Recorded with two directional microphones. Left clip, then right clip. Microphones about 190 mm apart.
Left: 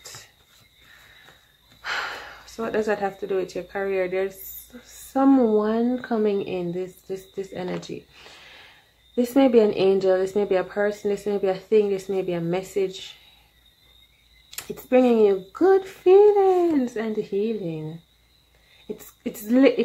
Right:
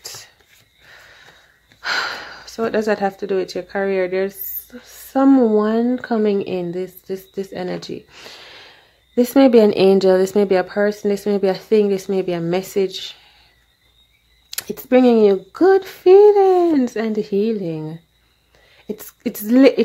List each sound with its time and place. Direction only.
1.8 s speech: 45° right (ahead or behind)
14.5 s speech: 45° right (ahead or behind)
19.2 s speech: 45° right (ahead or behind)